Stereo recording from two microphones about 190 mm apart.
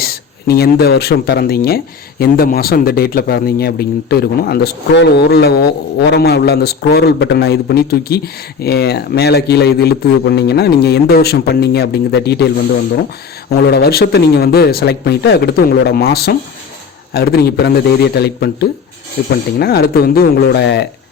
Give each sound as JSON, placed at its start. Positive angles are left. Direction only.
{"t": 0.0, "sound": "speech", "side_deg": 55}
{"t": 13.5, "sound": "speech", "side_deg": 55}